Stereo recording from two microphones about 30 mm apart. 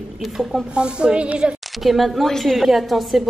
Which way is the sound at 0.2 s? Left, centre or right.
Centre.